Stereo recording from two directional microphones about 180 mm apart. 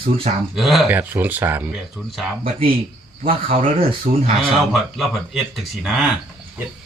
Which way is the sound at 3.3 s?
30° right (ahead or behind).